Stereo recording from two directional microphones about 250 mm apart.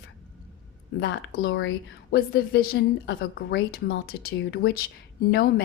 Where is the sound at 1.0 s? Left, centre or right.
Left.